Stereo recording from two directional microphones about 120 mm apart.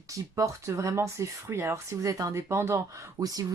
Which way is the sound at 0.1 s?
25° right (ahead or behind).